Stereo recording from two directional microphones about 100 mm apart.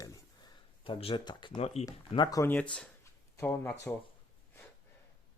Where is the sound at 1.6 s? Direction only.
90° left.